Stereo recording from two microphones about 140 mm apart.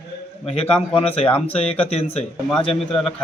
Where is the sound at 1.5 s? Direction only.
45° left (ahead or behind).